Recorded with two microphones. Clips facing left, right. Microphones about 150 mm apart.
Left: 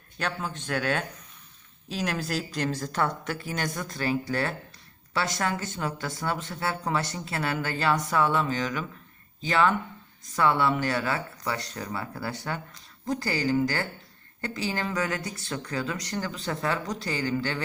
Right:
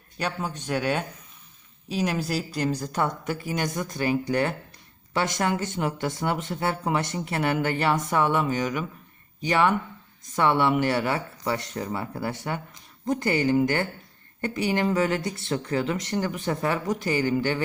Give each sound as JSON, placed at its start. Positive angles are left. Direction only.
{"t": 0.2, "sound": "speech", "side_deg": -10}